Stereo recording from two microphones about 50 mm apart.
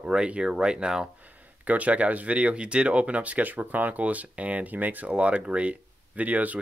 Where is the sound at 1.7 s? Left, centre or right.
Right.